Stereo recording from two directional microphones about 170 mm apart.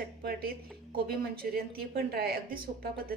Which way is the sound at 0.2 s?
65° right (ahead or behind).